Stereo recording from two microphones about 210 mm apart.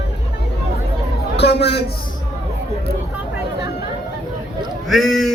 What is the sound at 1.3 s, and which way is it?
Speech, 55° left (ahead or behind).